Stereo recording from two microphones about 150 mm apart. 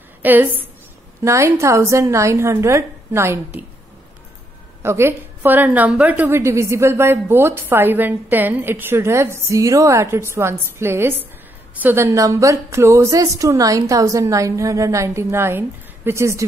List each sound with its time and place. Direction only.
0.2 s a woman's voice: 10° right (ahead or behind)
4.8 s a woman's voice: 15° right (ahead or behind)